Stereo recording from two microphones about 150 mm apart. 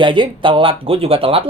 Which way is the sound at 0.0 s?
35° right (ahead or behind).